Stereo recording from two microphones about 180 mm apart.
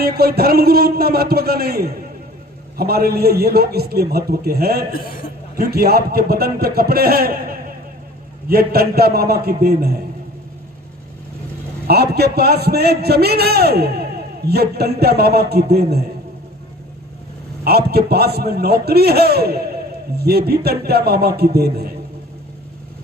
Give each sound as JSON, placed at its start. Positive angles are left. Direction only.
{"t": 0.0, "sound": "a man's voice", "side_deg": -60}
{"t": 11.9, "sound": "a man's voice", "side_deg": -60}
{"t": 17.6, "sound": "a man's voice", "side_deg": -60}